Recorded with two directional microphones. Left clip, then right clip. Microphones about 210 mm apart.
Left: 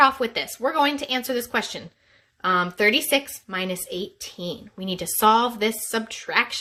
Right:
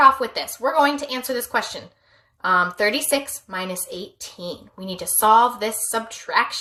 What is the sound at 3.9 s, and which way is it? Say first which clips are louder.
Speech: left 2 dB; 70° left (ahead or behind).